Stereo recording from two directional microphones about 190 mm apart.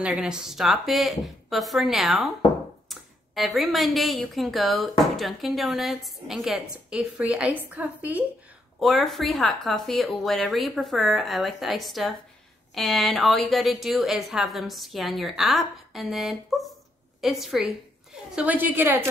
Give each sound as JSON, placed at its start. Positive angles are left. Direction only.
{"t": 0.0, "sound": "a woman's voice", "side_deg": -5}